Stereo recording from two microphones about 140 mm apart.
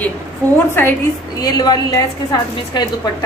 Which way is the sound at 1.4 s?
30° left (ahead or behind).